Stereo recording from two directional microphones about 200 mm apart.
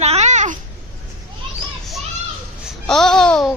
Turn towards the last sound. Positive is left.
turn(degrees=5)  # may be behind; listen again after turning